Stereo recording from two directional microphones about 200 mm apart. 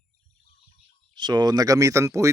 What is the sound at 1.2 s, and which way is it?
Speech, 20° right (ahead or behind).